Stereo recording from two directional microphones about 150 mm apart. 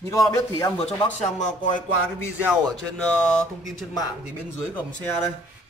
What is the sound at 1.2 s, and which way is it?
Speech, 50° left (ahead or behind).